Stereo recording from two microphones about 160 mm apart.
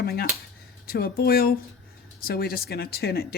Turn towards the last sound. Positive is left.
turn(degrees=75)  # may be behind; listen again after turning